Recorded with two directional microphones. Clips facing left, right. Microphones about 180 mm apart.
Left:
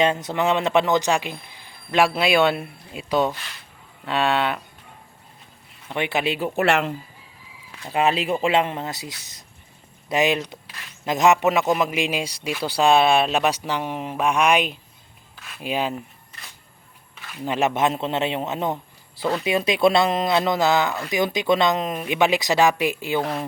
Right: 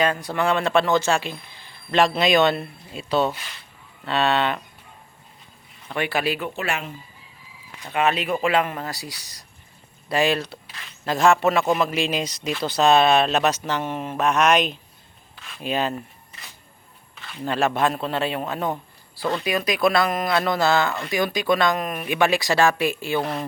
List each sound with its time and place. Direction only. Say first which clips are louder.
0.0 s speech: left 1 dB; 20° left (ahead or behind)
5.9 s speech: even; 20° left (ahead or behind)
6.6 s speech: left 8 dB; 75° left (ahead or behind)
7.9 s speech: left 1 dB; 30° left (ahead or behind); by 16.0 s 10° left (ahead or behind)
17.3 s speech: even; 15° left (ahead or behind)
23.2 s speech: left 1 dB; centre (ahead or behind)